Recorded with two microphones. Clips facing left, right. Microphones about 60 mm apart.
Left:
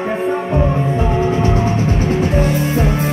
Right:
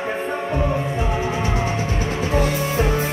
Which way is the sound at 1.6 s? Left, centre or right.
Left.